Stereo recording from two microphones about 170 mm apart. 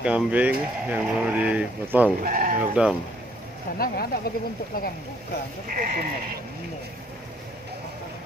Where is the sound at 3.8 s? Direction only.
60° left (ahead or behind).